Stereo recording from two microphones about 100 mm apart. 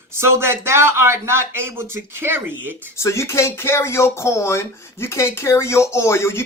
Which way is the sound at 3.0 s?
30° left (ahead or behind).